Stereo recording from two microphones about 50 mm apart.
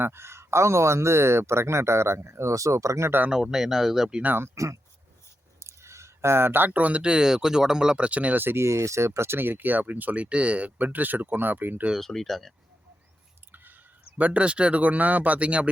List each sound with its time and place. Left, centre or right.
0.0 s speech: right
3.2 s speech: centre
4.4 s speech: right
5.5 s speech: right
8.4 s speech: right
8.6 s speech: right
10.8 s speech: right
11.9 s speech: centre
14.2 s speech: right